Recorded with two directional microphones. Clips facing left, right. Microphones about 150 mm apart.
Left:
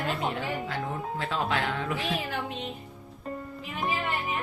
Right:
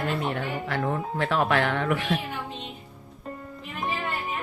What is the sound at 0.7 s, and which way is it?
Speech, 75° right (ahead or behind).